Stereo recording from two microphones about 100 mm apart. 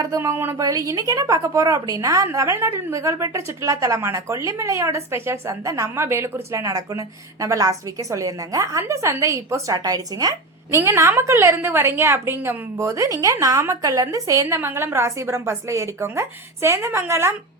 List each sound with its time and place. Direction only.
0.0 s a woman's voice: 30° right (ahead or behind)